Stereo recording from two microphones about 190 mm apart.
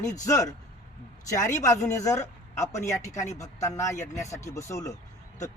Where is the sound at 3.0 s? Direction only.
40° left (ahead or behind).